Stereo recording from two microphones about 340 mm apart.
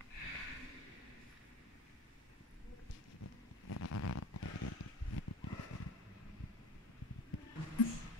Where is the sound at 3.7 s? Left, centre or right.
Left.